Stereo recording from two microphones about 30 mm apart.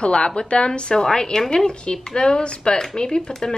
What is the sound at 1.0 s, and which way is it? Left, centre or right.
Speech, left.